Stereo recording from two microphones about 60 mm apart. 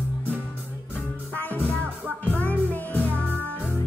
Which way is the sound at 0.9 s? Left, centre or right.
Left.